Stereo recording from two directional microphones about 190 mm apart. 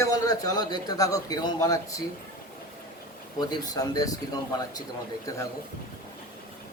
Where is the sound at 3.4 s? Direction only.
20° left (ahead or behind).